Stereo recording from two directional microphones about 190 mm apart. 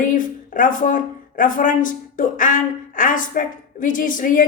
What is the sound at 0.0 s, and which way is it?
A woman's voice, 45° left (ahead or behind).